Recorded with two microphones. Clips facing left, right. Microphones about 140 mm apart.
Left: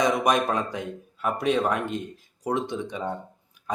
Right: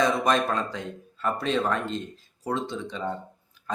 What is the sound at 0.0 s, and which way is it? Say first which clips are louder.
Speech: left 1 dB; 15° left (ahead or behind).